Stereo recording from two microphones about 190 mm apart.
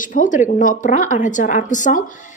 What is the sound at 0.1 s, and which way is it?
A woman's voice, 45° left (ahead or behind).